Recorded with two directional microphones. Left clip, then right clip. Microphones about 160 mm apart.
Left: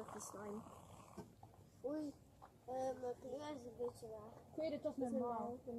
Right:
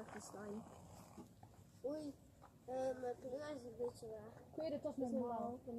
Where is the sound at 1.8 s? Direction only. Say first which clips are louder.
Even; 25° right (ahead or behind).